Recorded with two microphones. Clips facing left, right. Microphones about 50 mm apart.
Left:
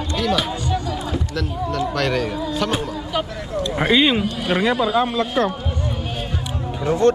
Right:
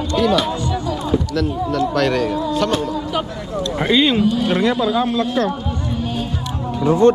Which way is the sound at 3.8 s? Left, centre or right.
Centre.